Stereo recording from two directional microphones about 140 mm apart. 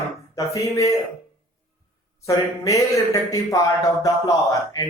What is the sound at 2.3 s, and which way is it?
Speech, 20° left (ahead or behind).